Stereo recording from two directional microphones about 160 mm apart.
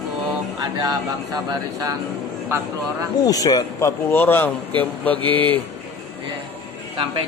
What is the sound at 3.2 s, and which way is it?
Speech, 25° left (ahead or behind).